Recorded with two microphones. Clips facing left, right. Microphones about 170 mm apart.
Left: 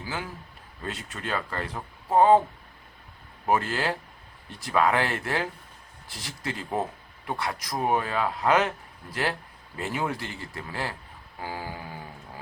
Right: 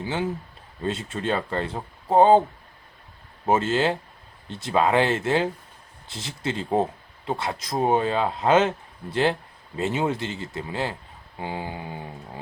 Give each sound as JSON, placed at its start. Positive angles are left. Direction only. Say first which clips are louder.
{"t": 0.0, "sound": "speech", "louder": "right 8 dB", "side_deg": -25}
{"t": 3.4, "sound": "speech", "louder": "right 4 dB", "side_deg": -25}